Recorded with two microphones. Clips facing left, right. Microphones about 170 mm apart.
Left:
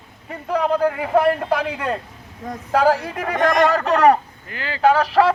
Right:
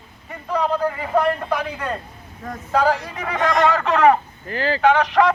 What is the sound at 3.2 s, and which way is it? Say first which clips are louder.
Speech: left 1 dB; 45° left (ahead or behind).